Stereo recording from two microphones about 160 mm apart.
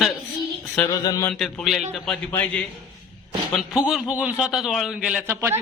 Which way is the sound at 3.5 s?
5° right (ahead or behind).